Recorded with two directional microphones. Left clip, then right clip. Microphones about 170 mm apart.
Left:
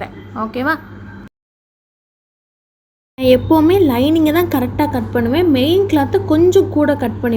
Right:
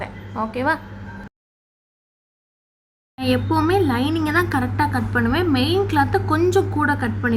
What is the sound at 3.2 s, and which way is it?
A woman's voice, 15° left (ahead or behind).